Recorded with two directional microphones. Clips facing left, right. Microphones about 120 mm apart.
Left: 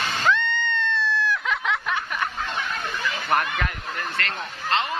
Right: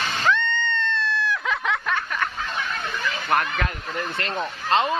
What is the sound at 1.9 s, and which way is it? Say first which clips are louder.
Snicker: right 1 dB; 15° left (ahead or behind).